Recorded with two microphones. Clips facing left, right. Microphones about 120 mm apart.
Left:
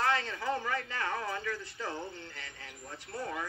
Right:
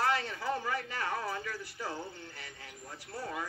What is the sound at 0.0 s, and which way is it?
Speech, 15° right (ahead or behind).